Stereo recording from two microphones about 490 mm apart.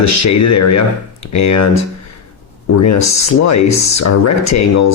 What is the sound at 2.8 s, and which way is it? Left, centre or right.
Speech, left.